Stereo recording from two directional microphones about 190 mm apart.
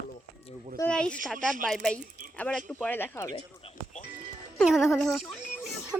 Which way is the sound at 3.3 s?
35° left (ahead or behind).